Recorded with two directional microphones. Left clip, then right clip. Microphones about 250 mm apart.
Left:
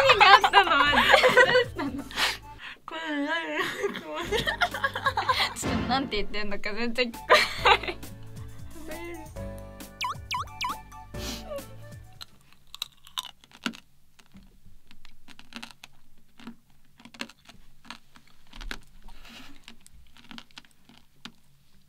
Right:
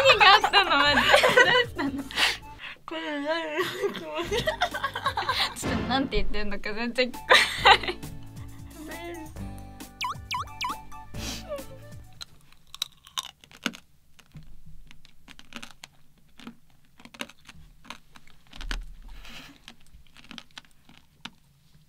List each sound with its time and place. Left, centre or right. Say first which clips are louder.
0.5 s snicker: left 1 dB; centre
1.1 s chuckle: even; centre
2.0 s music: right 3 dB; right
5.3 s music: left 2 dB; centre
5.6 s music: even; centre
5.9 s speech: right 1 dB; left
7.2 s music: right 2 dB; left
8.0 s music: right 2 dB; centre
11.1 s music: even; right
11.5 s music: right 1 dB; centre
12.2 s chewing: right 4 dB; right
13.5 s typing: right 2 dB; right
15.2 s computer keyboard: even; right
16.3 s typing: right 1 dB; right